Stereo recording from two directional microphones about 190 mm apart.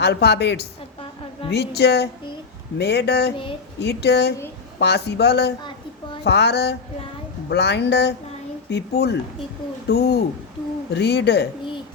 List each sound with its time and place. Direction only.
0.0 s speech: 60° left (ahead or behind)